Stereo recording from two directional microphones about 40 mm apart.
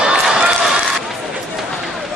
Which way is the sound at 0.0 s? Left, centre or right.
Centre.